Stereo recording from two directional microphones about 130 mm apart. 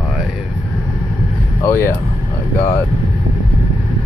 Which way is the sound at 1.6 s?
20° left (ahead or behind).